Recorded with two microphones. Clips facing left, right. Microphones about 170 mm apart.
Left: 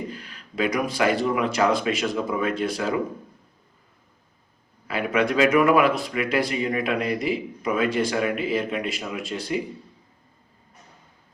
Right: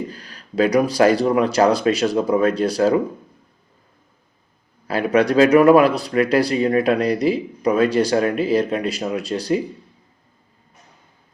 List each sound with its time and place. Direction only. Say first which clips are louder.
0.1 s speech: right 2 dB; 35° right (ahead or behind)
4.9 s speech: right 6 dB; 35° right (ahead or behind)